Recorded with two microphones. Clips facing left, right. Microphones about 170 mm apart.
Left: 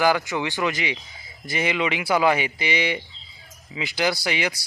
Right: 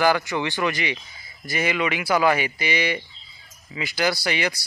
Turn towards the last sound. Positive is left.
turn(degrees=15)  # may be behind; listen again after turning